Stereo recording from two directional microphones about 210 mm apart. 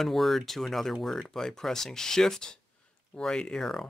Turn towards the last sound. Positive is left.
turn(degrees=0)  # may be behind; listen again after turning